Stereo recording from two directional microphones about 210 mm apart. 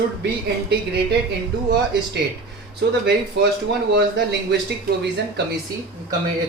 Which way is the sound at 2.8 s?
50° right (ahead or behind).